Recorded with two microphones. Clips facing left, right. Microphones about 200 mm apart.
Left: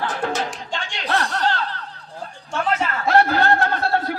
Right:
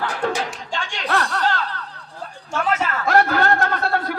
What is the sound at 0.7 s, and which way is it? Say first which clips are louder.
Chuckle: right 2 dB; 35° left (ahead or behind).